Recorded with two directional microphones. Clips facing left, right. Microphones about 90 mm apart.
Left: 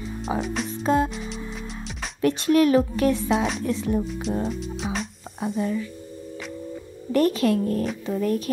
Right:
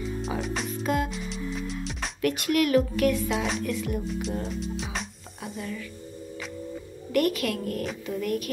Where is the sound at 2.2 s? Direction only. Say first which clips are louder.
Left 6 dB; 30° left (ahead or behind).